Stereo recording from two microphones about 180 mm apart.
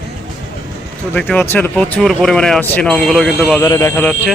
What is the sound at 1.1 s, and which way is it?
Speech, 10° left (ahead or behind).